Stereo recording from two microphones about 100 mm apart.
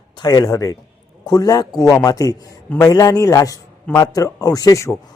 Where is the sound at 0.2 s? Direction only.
40° left (ahead or behind).